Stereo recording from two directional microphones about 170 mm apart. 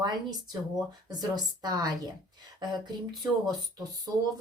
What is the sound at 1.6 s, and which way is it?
Speech, 25° right (ahead or behind).